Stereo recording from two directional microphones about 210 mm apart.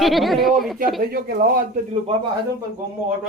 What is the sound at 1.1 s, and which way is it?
Speech, 45° right (ahead or behind).